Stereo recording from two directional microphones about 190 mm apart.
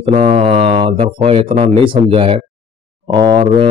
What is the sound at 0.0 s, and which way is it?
A man's voice, 30° right (ahead or behind).